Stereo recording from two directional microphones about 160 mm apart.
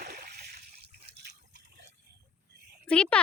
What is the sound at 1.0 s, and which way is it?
Liquid, 90° right.